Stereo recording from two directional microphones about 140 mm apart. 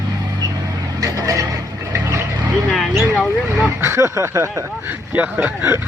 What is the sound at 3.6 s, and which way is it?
Speech, 20° right (ahead or behind).